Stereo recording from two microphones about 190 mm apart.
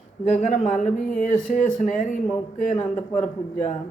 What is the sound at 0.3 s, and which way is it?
Speech, 40° left (ahead or behind).